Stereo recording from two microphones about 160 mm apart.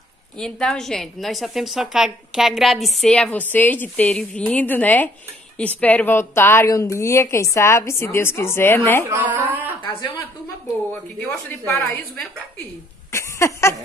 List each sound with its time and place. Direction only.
0.4 s a woman's voice: 5° left (ahead or behind)
9.0 s speech: 15° right (ahead or behind)
10.9 s a woman's voice: 10° left (ahead or behind)
13.1 s a sound: 15° left (ahead or behind)